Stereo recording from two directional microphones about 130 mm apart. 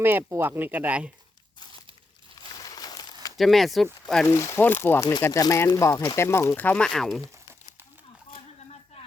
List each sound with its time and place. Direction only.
0.0 s speech: 15° right (ahead or behind)
2.6 s crumpling: 30° left (ahead or behind)
3.3 s speech: centre (ahead or behind)
4.3 s speech: 20° left (ahead or behind); by 7.2 s 5° left (ahead or behind)